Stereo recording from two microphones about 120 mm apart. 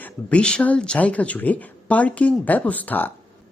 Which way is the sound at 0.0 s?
10° left (ahead or behind).